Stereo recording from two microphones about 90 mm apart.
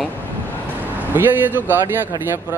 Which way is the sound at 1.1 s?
20° right (ahead or behind).